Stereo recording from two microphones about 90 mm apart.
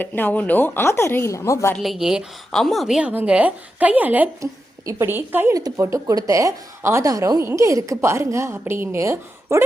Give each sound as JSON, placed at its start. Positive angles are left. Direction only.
{"t": 0.0, "sound": "a woman's voice", "side_deg": 20}
{"t": 1.8, "sound": "speech", "side_deg": -5}
{"t": 3.1, "sound": "a woman's voice", "side_deg": -15}
{"t": 5.5, "sound": "a woman's voice", "side_deg": -40}